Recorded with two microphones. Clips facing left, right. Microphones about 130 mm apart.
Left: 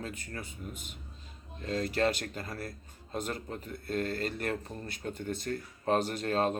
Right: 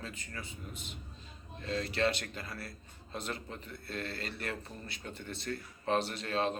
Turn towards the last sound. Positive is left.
turn(degrees=45)  # may be behind; listen again after turning